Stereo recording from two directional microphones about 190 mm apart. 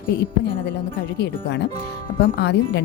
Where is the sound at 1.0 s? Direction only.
60° left (ahead or behind).